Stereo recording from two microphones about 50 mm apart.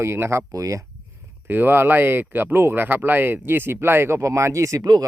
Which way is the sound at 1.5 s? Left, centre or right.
Right.